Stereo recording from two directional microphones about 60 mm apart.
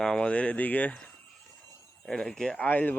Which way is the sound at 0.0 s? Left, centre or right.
Centre.